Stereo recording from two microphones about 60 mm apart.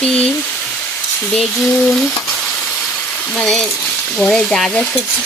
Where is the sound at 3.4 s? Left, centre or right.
Centre.